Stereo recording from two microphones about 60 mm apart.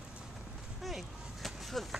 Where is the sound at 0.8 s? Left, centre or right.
Centre.